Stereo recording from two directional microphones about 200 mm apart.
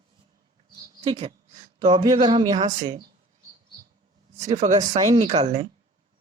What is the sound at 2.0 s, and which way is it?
Speech, 20° right (ahead or behind).